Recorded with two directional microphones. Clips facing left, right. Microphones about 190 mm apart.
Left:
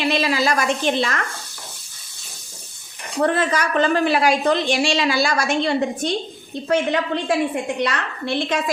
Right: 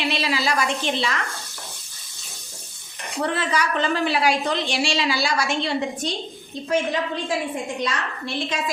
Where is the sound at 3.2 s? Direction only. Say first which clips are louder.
Left 4 dB; 50° left (ahead or behind).